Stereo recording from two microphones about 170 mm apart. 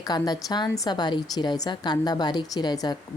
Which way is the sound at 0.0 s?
20° left (ahead or behind).